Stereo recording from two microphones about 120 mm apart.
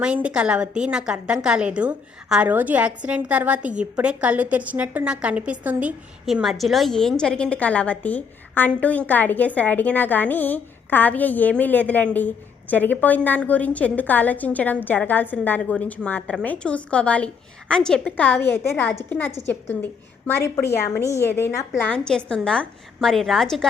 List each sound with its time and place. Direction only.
0.0 s a woman's voice: 10° right (ahead or behind); by 21.5 s 20° left (ahead or behind)
21.8 s a woman's voice: 10° left (ahead or behind)